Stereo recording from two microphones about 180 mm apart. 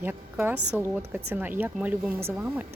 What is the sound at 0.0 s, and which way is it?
A woman's voice, 10° right (ahead or behind).